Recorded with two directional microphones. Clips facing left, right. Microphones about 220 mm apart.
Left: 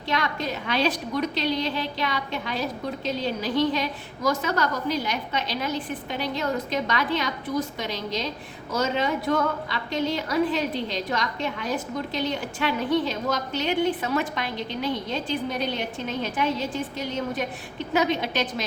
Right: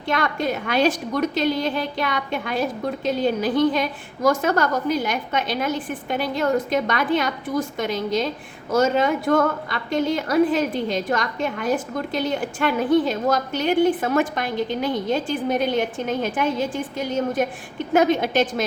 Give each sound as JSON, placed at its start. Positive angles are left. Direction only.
{"t": 0.1, "sound": "a woman's voice", "side_deg": -50}